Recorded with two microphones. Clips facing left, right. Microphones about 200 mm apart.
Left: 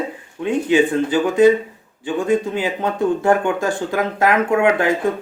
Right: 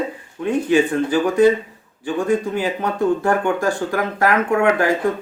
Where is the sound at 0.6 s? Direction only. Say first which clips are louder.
Left 1 dB; 15° left (ahead or behind).